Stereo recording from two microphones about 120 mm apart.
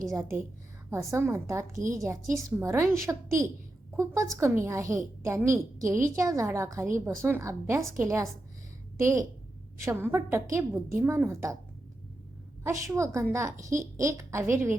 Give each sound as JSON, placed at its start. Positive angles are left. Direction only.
{"t": 0.0, "sound": "a woman's voice", "side_deg": -25}
{"t": 12.6, "sound": "a woman's voice", "side_deg": -25}